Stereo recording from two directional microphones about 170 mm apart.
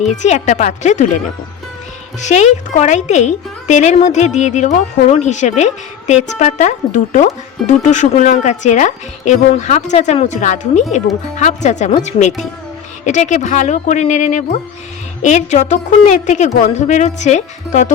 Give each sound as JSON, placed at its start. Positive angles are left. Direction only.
{"t": 0.0, "sound": "a woman's voice", "side_deg": 45}
{"t": 2.2, "sound": "a woman's voice", "side_deg": 45}